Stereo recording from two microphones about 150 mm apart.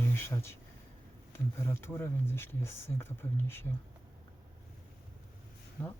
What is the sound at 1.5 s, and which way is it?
Speech, 15° left (ahead or behind).